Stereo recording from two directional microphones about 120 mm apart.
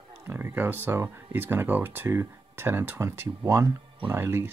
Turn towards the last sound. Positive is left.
turn(degrees=-20)  # may be behind; listen again after turning